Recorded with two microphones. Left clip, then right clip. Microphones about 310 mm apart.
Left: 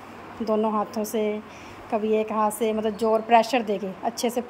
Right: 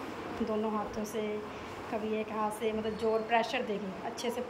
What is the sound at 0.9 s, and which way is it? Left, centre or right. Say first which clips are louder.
A woman's voice: left 9 dB; centre.